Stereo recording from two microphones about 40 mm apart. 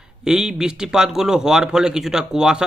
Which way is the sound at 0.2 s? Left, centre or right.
Centre.